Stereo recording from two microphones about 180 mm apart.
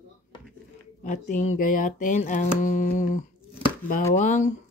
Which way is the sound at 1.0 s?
45° left (ahead or behind).